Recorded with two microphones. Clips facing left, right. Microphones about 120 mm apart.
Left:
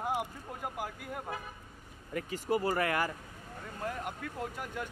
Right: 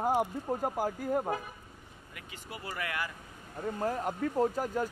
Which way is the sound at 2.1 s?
40° left (ahead or behind).